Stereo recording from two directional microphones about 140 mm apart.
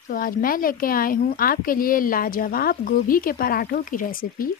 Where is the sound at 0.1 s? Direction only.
90° left.